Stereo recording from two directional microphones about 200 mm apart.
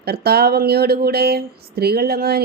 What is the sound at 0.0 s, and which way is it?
Speech, 50° right (ahead or behind).